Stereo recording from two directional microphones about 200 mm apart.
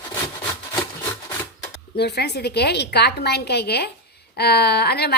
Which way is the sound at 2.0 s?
55° left (ahead or behind).